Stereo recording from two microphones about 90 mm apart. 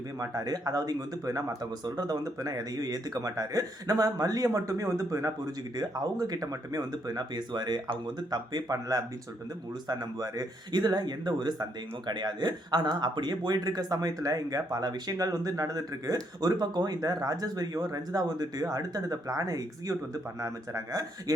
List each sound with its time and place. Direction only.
0.2 s speech: 45° right (ahead or behind)